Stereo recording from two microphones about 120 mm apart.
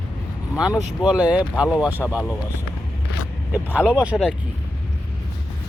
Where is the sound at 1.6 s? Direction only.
5° right (ahead or behind).